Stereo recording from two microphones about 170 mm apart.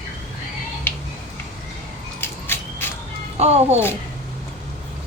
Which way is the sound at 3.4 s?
40° right (ahead or behind).